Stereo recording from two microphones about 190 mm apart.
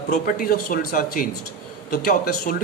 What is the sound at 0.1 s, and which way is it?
Speech, 50° left (ahead or behind).